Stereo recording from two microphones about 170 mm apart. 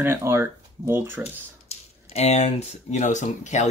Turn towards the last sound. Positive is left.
turn(degrees=45)  # may be behind; listen again after turning